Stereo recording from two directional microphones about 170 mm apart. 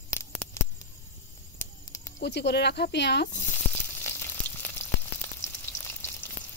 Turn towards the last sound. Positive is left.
turn(degrees=15)  # may be behind; listen again after turning